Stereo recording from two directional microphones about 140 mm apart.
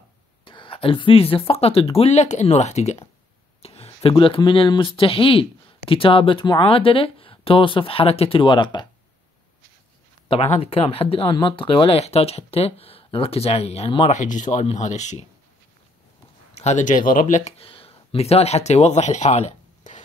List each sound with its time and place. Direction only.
0.5 s a sound: 35° left (ahead or behind)
1.5 s speech: 45° left (ahead or behind)
10.2 s speech: 40° left (ahead or behind)
14.1 s speech: 65° left (ahead or behind)
16.5 s speech: 55° left (ahead or behind); by 17.4 s 80° left
17.5 s speech: 45° left (ahead or behind)